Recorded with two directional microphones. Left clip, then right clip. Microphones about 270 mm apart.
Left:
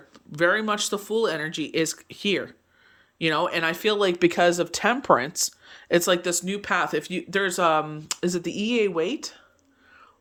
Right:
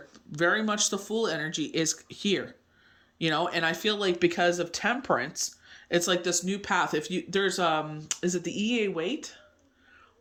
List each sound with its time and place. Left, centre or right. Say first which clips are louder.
0.1 s speech: left 4 dB; centre